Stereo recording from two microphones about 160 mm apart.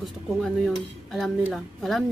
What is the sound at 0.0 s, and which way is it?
Speech, centre (ahead or behind).